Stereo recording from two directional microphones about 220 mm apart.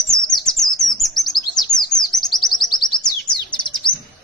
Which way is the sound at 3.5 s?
20° left (ahead or behind).